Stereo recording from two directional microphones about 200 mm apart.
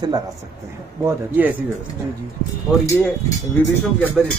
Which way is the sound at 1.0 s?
10° right (ahead or behind).